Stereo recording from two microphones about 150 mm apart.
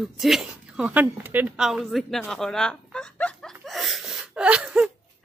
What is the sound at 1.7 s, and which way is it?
Speech, centre (ahead or behind).